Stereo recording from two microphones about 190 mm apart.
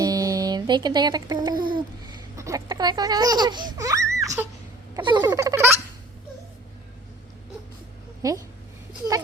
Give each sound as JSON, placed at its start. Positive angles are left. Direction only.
{"t": 0.0, "sound": "music", "side_deg": -20}
{"t": 1.7, "sound": "a child's voice", "side_deg": -20}
{"t": 5.2, "sound": "baby laughter", "side_deg": -15}
{"t": 8.2, "sound": "speech", "side_deg": -20}
{"t": 8.9, "sound": "a sound", "side_deg": -20}